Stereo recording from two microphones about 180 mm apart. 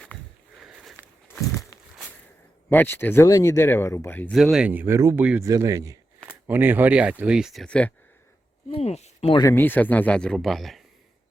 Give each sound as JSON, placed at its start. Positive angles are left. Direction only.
{"t": 0.6, "sound": "a sound", "side_deg": -5}
{"t": 0.9, "sound": "walk", "side_deg": 5}
{"t": 1.7, "sound": "walk", "side_deg": 20}
{"t": 2.6, "sound": "speech", "side_deg": 10}
{"t": 4.4, "sound": "speech", "side_deg": 0}
{"t": 8.7, "sound": "speech", "side_deg": 35}
{"t": 9.4, "sound": "speech", "side_deg": 15}